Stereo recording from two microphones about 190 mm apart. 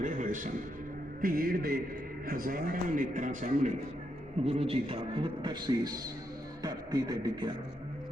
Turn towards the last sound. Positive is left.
turn(degrees=-20)  # may be behind; listen again after turning